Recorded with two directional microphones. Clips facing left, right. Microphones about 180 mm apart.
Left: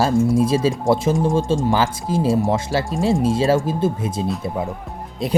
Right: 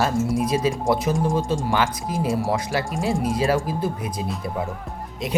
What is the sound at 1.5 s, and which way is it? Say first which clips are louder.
Speech: left 4 dB; 30° left (ahead or behind).